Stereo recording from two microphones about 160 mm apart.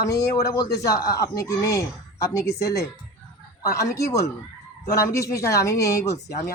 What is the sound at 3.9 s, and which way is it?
Speech, 20° left (ahead or behind).